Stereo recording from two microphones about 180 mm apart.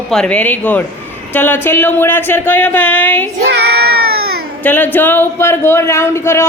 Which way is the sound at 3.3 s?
60° right (ahead or behind).